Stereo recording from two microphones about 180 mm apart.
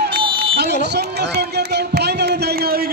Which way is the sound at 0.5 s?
65° right (ahead or behind).